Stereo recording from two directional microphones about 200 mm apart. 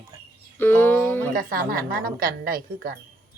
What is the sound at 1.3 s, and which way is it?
A woman's voice, 45° right (ahead or behind).